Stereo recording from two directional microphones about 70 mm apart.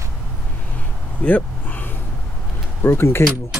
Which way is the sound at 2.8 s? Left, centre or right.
Left.